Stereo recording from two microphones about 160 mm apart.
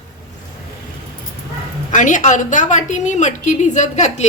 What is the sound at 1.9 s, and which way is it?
A woman's voice, 50° left (ahead or behind).